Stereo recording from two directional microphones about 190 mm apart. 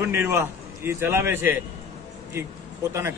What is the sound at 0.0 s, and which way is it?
A man's voice, 10° right (ahead or behind).